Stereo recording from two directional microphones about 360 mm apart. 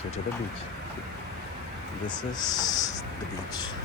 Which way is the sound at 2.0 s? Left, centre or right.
Centre.